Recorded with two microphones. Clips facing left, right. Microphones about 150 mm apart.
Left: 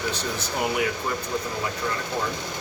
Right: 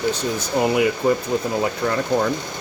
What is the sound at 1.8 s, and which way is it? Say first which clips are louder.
Speech: right 9 dB; 55° right (ahead or behind).